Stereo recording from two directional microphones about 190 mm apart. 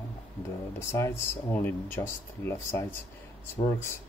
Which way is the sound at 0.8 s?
15° left (ahead or behind).